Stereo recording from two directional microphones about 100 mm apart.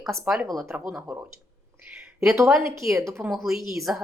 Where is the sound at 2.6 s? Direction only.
30° right (ahead or behind).